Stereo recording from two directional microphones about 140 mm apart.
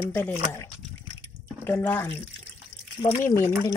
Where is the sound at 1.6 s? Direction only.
15° left (ahead or behind).